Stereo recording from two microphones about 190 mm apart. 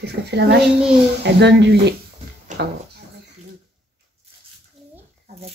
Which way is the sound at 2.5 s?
40° right (ahead or behind).